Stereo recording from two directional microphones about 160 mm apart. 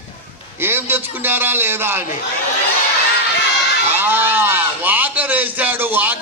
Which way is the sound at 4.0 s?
15° right (ahead or behind).